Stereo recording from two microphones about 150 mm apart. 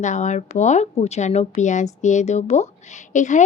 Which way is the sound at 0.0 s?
55° left (ahead or behind).